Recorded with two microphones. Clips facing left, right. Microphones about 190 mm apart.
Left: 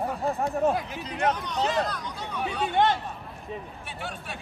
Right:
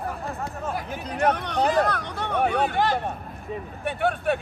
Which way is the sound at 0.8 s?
55° right (ahead or behind).